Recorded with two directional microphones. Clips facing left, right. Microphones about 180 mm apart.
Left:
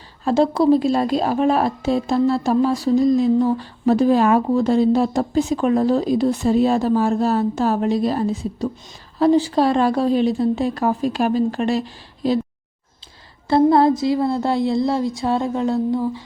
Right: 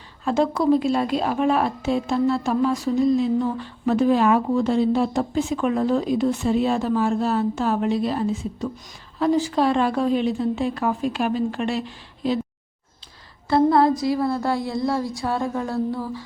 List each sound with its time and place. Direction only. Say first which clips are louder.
0.3 s a woman's voice: left 4 dB; 35° left (ahead or behind)
13.5 s speech: left 3 dB; 25° left (ahead or behind)